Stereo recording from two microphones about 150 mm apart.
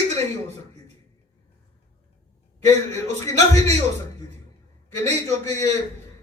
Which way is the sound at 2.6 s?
45° right (ahead or behind).